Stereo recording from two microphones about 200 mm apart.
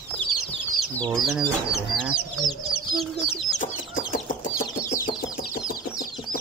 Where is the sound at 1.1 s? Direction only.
Centre (ahead or behind).